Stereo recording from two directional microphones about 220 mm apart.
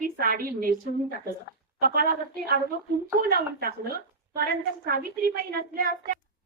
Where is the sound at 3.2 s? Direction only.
40° right (ahead or behind).